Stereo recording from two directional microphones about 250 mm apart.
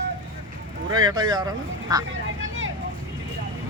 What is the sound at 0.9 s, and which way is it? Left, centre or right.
Speech, centre.